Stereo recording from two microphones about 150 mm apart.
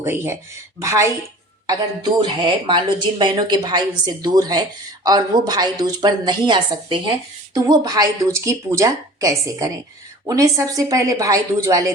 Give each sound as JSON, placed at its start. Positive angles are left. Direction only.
{"t": 0.0, "sound": "speech", "side_deg": -15}
{"t": 1.6, "sound": "speech", "side_deg": -30}